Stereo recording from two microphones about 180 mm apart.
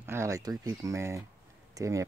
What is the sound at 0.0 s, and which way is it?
Speech, 15° right (ahead or behind).